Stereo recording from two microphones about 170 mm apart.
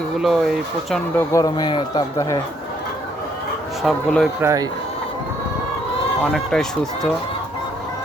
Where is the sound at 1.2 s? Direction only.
20° left (ahead or behind).